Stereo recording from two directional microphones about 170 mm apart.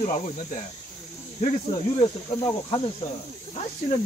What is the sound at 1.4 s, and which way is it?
Speech, 30° left (ahead or behind).